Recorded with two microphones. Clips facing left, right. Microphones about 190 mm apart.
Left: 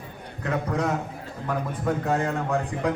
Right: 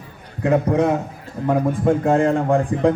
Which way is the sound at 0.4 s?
25° right (ahead or behind).